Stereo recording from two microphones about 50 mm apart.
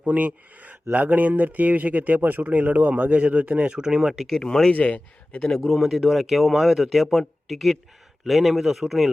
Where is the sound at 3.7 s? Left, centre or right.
Centre.